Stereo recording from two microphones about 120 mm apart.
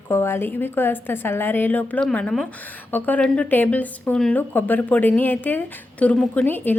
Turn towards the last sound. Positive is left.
turn(degrees=15)  # may be behind; listen again after turning